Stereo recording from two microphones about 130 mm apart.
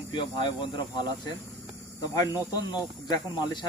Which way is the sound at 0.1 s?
40° left (ahead or behind).